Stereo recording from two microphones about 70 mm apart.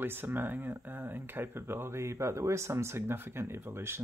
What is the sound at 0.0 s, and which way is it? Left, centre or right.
Speech, right.